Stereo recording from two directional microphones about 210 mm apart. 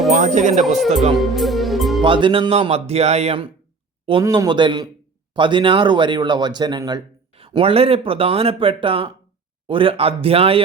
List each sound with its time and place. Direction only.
0.1 s speech: 35° right (ahead or behind)
1.1 s music: centre (ahead or behind)
2.0 s speech: 25° right (ahead or behind)